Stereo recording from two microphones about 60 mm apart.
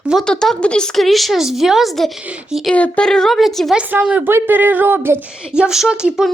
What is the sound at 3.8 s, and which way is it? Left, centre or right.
Speech, right.